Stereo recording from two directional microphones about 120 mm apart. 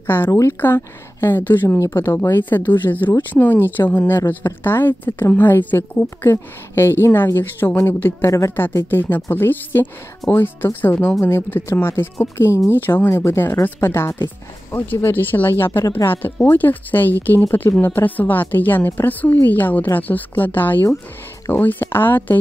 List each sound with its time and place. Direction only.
0.0 s a woman's voice: 20° left (ahead or behind)